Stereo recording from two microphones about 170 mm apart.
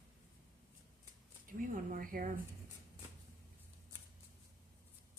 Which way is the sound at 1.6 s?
55° right (ahead or behind).